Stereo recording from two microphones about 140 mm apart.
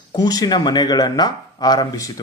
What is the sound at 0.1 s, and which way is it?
Speech, 30° left (ahead or behind).